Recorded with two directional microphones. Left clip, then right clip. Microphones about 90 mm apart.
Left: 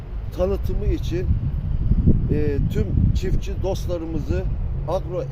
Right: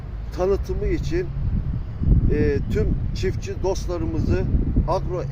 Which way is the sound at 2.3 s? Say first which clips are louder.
Right 7 dB; 65° left (ahead or behind).